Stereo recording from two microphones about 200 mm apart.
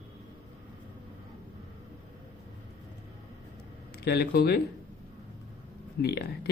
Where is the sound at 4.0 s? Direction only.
50° left (ahead or behind).